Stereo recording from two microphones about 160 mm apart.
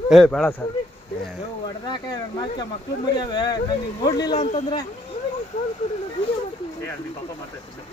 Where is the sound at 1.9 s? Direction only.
25° left (ahead or behind).